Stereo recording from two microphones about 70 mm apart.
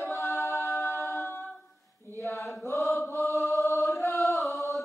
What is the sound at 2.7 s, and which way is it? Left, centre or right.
Chant, left.